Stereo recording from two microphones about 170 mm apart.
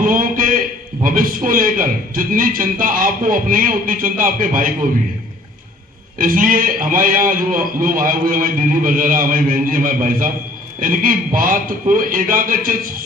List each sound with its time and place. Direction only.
0.0 s a sound: 55° right (ahead or behind)
1.0 s a man's voice: 55° right (ahead or behind)
6.1 s a man's voice: 55° right (ahead or behind)